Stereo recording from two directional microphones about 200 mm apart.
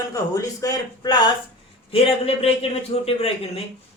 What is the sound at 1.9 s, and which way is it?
A man's voice, 30° left (ahead or behind).